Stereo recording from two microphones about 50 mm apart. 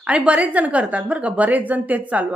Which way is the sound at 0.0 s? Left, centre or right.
Right.